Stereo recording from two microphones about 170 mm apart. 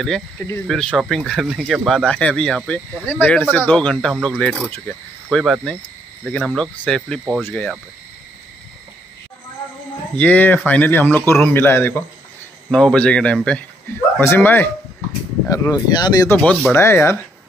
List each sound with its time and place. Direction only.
0.7 s speech: 5° left (ahead or behind)
10.1 s speech: 10° left (ahead or behind)
16.3 s speech: 5° left (ahead or behind)
16.7 s speech: 15° left (ahead or behind)